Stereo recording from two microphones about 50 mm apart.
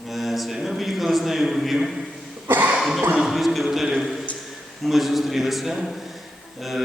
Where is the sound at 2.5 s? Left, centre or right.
Right.